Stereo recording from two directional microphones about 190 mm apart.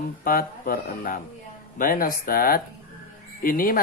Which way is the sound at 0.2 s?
50° left (ahead or behind).